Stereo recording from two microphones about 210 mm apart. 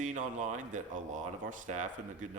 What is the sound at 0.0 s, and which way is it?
Speech, 35° right (ahead or behind).